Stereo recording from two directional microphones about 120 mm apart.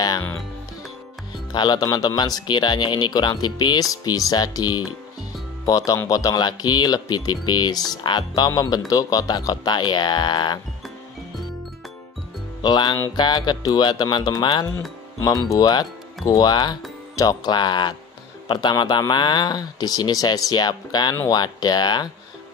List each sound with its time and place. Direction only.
1.5 s speech: 35° left (ahead or behind)
12.6 s speech: 40° left (ahead or behind)